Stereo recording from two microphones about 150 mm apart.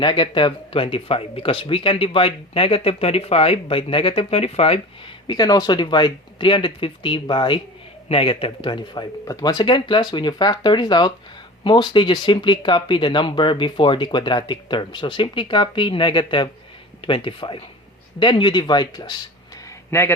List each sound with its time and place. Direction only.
0.0 s speech: 35° left (ahead or behind)
5.3 s speech: 25° left (ahead or behind)
19.9 s a man's voice: 15° left (ahead or behind)